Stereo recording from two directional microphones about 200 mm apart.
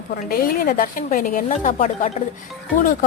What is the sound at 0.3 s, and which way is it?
Speech, 45° left (ahead or behind).